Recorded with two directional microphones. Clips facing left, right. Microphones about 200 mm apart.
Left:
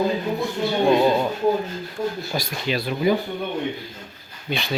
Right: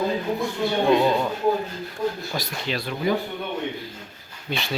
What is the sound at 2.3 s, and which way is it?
Speech, 15° left (ahead or behind).